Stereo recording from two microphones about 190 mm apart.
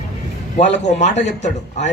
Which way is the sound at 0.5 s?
35° left (ahead or behind).